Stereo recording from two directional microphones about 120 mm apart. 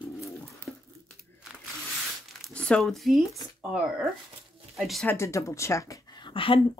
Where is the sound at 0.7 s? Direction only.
Centre (ahead or behind).